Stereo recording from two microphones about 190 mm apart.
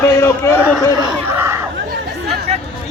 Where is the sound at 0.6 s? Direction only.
10° right (ahead or behind).